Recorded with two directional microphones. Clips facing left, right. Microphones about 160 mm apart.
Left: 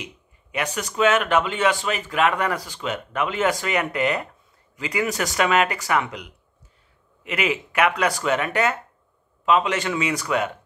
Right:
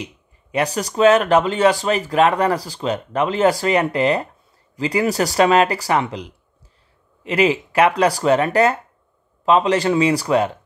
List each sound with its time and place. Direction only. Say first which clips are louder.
0.0 s a man's voice: right 5 dB; 35° right (ahead or behind)